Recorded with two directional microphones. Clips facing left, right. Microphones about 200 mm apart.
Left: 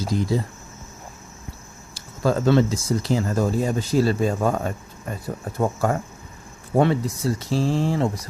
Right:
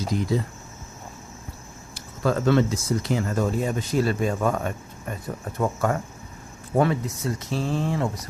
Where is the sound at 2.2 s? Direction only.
30° left (ahead or behind).